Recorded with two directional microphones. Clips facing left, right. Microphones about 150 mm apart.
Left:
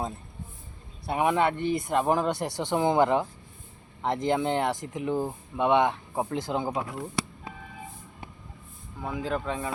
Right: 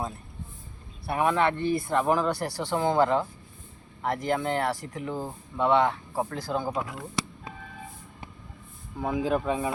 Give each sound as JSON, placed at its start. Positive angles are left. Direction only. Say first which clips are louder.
{"t": 1.0, "sound": "speech", "louder": "even", "side_deg": 20}
{"t": 9.0, "sound": "speech", "louder": "right 4 dB", "side_deg": -15}